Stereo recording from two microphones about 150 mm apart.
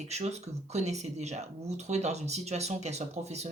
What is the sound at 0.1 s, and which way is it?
Speech, 45° right (ahead or behind).